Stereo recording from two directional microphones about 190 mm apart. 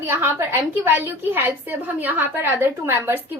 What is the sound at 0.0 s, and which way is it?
A woman's voice, 10° right (ahead or behind).